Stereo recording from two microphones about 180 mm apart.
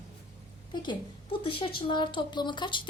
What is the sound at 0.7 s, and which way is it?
Speech, 25° left (ahead or behind).